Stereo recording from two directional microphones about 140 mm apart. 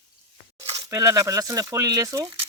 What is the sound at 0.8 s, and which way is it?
Speech, 25° right (ahead or behind).